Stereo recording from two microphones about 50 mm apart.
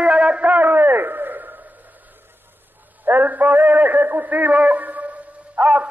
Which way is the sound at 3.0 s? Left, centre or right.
Right.